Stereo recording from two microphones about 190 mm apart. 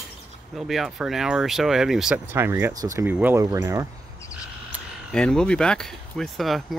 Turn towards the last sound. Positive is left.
turn(degrees=0)  # may be behind; listen again after turning